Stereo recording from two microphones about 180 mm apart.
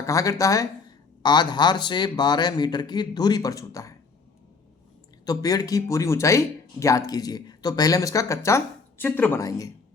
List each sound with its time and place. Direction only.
0.0 s a man's voice: 15° left (ahead or behind)
5.2 s speech: 20° left (ahead or behind)